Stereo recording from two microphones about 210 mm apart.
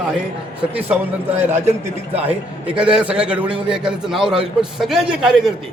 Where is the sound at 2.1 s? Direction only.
5° right (ahead or behind).